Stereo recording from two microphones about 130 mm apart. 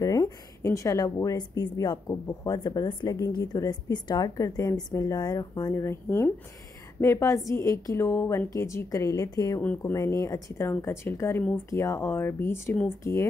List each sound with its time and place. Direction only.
0.0 s speech: 30° left (ahead or behind)